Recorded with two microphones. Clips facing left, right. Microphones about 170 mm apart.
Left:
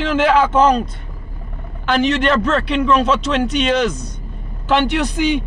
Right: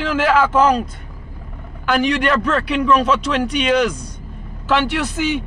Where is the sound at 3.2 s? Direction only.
10° right (ahead or behind).